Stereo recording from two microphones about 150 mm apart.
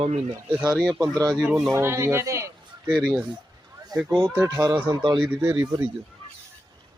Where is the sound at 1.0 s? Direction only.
25° right (ahead or behind).